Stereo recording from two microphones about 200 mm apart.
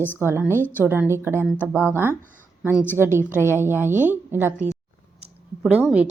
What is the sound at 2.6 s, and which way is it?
A woman's voice, 5° right (ahead or behind).